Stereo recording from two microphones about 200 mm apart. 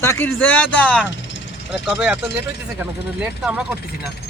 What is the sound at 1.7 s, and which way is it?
Speech, 5° right (ahead or behind).